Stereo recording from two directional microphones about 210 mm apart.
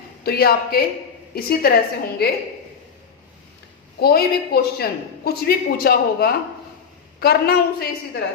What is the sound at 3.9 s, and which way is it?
A man's voice, 50° left (ahead or behind).